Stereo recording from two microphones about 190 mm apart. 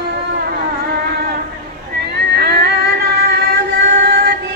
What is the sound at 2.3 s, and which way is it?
Music, 55° right (ahead or behind).